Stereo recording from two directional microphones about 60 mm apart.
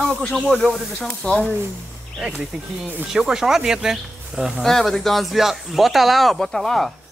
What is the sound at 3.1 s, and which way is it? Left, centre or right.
Speech, centre.